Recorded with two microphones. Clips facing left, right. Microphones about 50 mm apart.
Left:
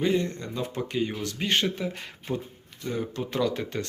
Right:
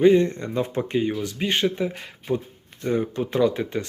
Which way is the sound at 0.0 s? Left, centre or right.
Right.